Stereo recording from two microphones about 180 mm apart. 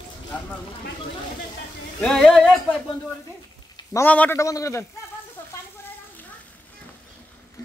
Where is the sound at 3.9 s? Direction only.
10° left (ahead or behind).